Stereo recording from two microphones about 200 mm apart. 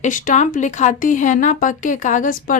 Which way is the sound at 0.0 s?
40° left (ahead or behind).